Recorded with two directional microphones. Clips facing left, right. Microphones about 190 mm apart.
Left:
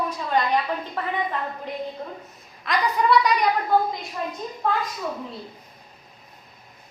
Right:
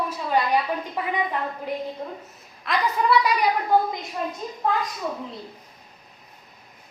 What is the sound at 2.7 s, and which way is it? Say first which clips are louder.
A woman's voice: left 1 dB; centre (ahead or behind).